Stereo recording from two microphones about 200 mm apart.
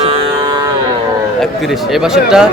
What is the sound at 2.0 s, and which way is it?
Speech, 5° right (ahead or behind).